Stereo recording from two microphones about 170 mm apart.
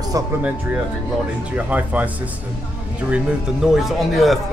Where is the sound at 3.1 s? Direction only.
5° right (ahead or behind).